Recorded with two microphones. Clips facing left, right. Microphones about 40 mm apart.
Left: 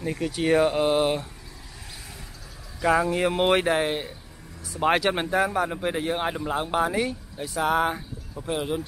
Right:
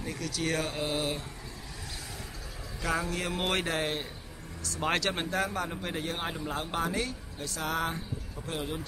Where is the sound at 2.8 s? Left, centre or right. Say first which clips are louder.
Left 10 dB; left.